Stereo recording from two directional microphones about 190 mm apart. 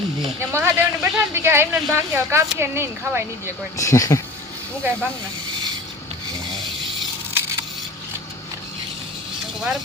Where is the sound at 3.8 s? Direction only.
15° left (ahead or behind).